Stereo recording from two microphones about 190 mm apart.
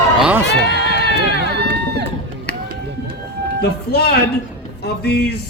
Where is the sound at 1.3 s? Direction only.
65° right (ahead or behind).